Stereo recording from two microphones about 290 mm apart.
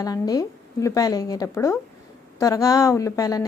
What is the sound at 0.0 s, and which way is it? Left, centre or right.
A woman's voice, centre.